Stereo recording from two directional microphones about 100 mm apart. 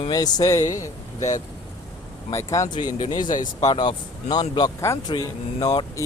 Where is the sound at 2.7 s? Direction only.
50° left (ahead or behind).